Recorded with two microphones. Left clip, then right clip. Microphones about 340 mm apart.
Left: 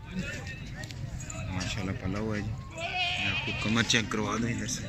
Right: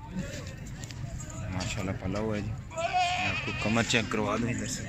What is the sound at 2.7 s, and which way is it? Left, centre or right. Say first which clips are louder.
Bleat: right 3 dB; centre.